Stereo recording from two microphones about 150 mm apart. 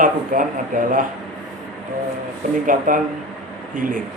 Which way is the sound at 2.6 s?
65° right (ahead or behind).